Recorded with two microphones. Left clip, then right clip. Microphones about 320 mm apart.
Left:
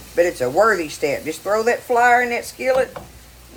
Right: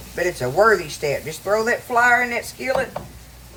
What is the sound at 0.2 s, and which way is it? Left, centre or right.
Speech, left.